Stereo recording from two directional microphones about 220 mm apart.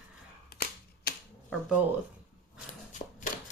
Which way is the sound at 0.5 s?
45° left (ahead or behind).